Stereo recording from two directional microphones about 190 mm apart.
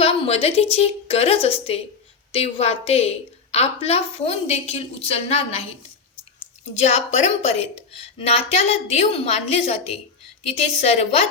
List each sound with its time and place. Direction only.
0.0 s a woman's voice: 30° left (ahead or behind)
6.7 s a woman's voice: 35° left (ahead or behind)